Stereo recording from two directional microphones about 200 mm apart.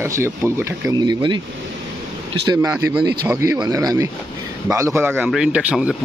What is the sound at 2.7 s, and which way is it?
A man's voice, 5° right (ahead or behind).